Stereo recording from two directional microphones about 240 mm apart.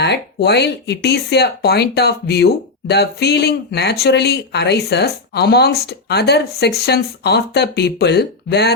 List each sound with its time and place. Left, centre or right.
0.0 s speech: left